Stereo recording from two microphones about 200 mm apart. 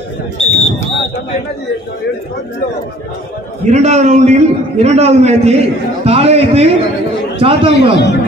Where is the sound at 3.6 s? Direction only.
35° right (ahead or behind).